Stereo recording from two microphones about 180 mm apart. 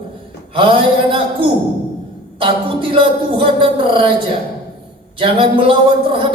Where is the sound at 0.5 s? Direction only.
30° right (ahead or behind).